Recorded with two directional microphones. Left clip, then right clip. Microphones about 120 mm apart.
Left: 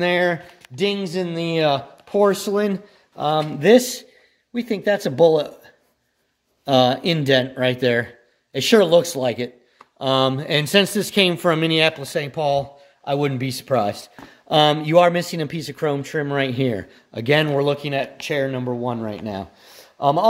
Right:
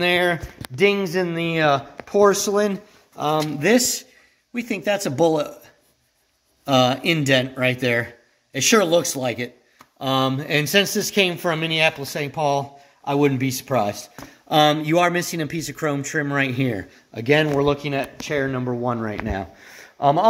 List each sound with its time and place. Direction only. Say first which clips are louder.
0.0 s a man's voice: even; 50° left (ahead or behind)
0.7 s speech: right 4 dB; 15° left (ahead or behind)
1.4 s speech: left 1 dB; 75° left (ahead or behind); by 5.6 s 40° left (ahead or behind)
6.6 s a man's voice: left 1 dB; 45° left (ahead or behind); by 11.1 s 90° left
11.8 s a man's voice: left 1 dB; 65° left (ahead or behind)
17.1 s speech: even; 90° left; by 18.1 s 70° left (ahead or behind)
18.2 s speech: left 1 dB; 80° left
18.7 s speech: right 1 dB; 50° left (ahead or behind)